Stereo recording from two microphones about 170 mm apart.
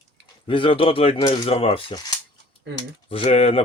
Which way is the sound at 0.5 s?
30° left (ahead or behind).